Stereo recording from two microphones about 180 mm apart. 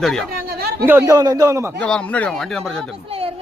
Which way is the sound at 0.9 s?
15° right (ahead or behind).